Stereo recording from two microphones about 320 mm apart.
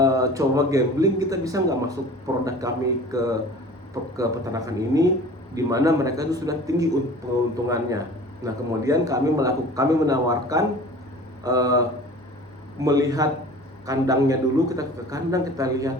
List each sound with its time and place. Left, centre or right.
0.0 s a man's voice: centre